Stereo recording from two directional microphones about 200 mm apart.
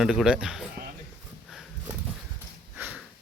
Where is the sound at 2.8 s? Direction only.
10° right (ahead or behind).